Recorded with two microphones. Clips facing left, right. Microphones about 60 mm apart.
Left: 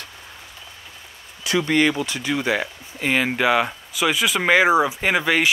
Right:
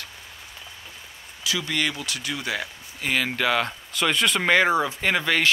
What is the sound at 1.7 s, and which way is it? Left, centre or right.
Speech, left.